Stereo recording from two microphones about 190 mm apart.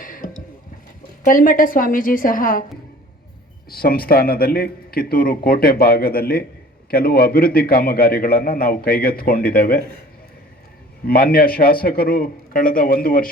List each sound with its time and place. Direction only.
0.0 s a sound: 45° left (ahead or behind)
1.2 s a man's voice: 45° left (ahead or behind)
3.7 s a man's voice: 50° left (ahead or behind)
11.0 s a man's voice: 50° left (ahead or behind)